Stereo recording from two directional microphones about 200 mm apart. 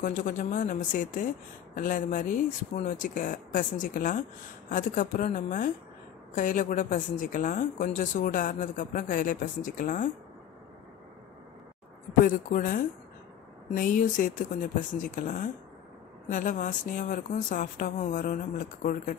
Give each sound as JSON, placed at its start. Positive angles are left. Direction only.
{"t": 0.0, "sound": "a woman's voice", "side_deg": 40}
{"t": 12.3, "sound": "a woman's voice", "side_deg": 40}